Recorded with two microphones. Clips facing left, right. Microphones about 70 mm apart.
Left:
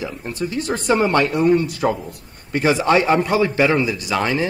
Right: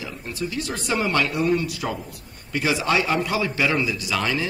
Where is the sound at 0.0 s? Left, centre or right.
Left.